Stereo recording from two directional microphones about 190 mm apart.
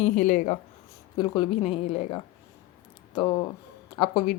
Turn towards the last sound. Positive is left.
turn(degrees=30)  # may be behind; listen again after turning